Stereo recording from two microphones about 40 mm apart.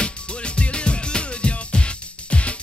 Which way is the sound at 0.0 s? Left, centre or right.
Left.